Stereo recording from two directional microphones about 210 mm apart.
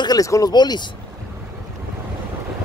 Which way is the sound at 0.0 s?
15° left (ahead or behind).